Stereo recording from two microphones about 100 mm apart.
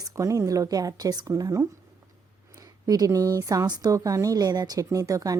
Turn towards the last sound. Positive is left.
turn(degrees=-35)  # may be behind; listen again after turning